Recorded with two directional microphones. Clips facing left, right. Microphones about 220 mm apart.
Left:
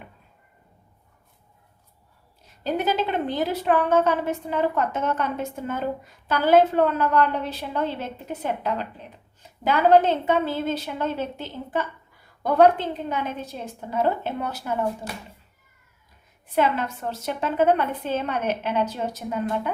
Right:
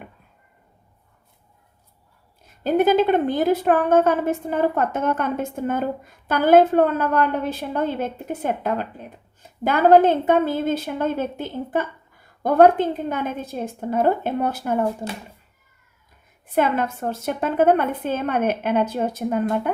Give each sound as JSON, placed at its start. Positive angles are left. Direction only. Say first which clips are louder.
{"t": 2.6, "sound": "a woman's voice", "louder": "right 7 dB", "side_deg": -50}
{"t": 16.6, "sound": "a woman's voice", "louder": "right 2 dB", "side_deg": -50}